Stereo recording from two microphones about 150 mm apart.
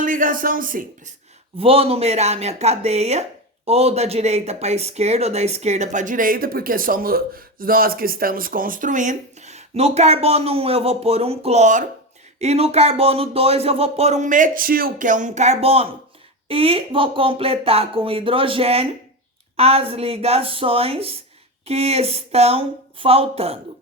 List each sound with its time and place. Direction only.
0.0 s speech: 65° right (ahead or behind)
1.5 s speech: 40° right (ahead or behind)